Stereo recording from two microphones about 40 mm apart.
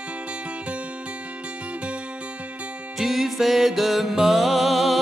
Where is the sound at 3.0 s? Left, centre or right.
Centre.